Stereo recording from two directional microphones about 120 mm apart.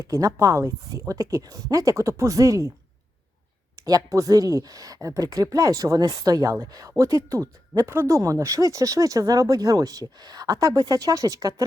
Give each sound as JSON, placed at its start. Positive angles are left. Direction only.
{"t": 0.1, "sound": "speech", "side_deg": -30}
{"t": 3.8, "sound": "speech", "side_deg": -30}